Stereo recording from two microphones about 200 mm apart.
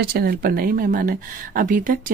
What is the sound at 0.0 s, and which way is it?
Speech, 50° right (ahead or behind).